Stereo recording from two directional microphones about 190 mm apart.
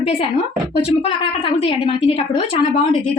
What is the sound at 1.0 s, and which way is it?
A woman's voice, 30° left (ahead or behind).